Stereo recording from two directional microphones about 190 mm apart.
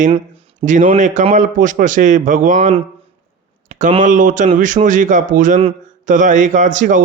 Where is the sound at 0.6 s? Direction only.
40° right (ahead or behind).